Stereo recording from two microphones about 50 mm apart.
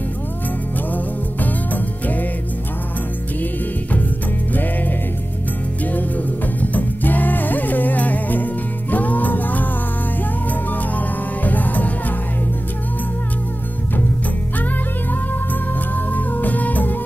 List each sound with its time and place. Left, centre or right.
5.9 s music: left
16.1 s music: left